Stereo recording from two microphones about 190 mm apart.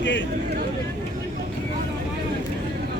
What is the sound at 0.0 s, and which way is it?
Speech, 75° left (ahead or behind).